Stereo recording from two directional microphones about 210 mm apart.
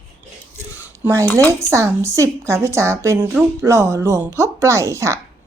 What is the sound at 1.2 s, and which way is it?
Speech, 10° left (ahead or behind).